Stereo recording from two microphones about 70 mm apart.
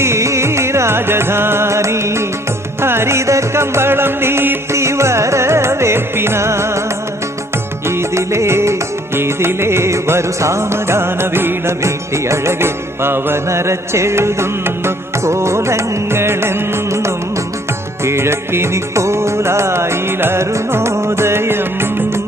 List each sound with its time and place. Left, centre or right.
0.0 s music: right